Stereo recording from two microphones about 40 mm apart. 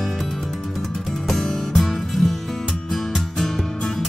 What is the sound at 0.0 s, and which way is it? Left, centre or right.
Music, centre.